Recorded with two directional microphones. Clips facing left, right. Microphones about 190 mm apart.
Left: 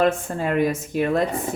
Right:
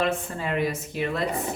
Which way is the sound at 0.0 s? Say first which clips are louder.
Left 6 dB; 45° left (ahead or behind).